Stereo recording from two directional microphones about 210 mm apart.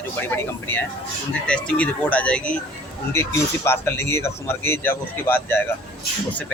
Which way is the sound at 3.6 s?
10° left (ahead or behind).